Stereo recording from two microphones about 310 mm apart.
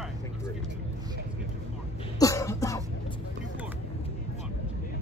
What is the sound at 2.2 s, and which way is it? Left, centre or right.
Cough, centre.